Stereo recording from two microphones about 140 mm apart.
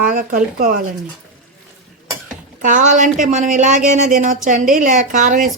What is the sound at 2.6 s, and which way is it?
A woman's voice, 65° right (ahead or behind).